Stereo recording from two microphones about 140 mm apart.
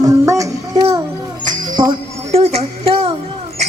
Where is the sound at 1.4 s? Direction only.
35° right (ahead or behind).